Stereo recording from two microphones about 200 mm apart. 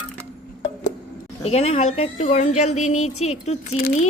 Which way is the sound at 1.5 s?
30° left (ahead or behind).